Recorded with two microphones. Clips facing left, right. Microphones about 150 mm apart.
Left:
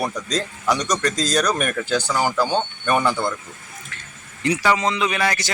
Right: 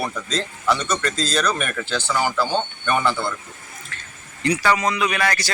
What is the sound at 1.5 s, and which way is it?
Speech, 45° left (ahead or behind).